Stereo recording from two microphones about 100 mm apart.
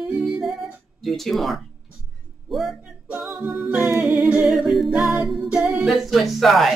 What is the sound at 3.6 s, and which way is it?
A capella, 20° right (ahead or behind).